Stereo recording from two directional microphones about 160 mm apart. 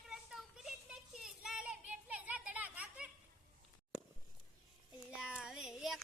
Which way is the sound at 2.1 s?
10° right (ahead or behind).